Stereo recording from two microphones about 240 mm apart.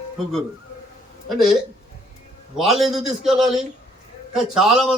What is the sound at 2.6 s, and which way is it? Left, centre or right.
A man's voice, centre.